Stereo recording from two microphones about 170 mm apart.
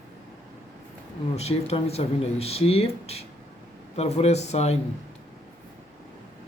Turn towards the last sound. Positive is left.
turn(degrees=40)  # may be behind; listen again after turning